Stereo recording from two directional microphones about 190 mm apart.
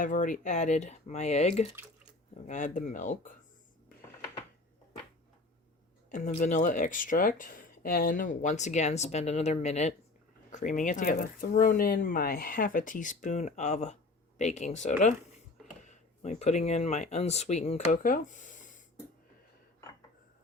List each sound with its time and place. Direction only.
0.0 s speech: 45° left (ahead or behind)
6.1 s speech: 40° left (ahead or behind)